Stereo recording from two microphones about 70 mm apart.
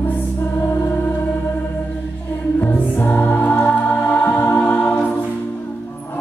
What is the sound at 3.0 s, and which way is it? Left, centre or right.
Music, left.